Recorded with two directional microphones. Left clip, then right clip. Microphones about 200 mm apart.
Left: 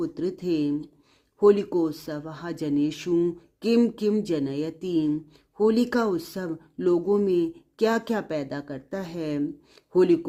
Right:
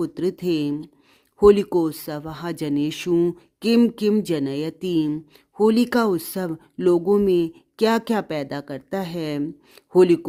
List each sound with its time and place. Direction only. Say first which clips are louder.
0.0 s speech: right 4 dB; 35° right (ahead or behind)